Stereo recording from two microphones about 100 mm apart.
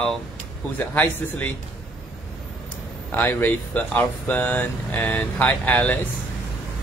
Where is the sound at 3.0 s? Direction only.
20° left (ahead or behind).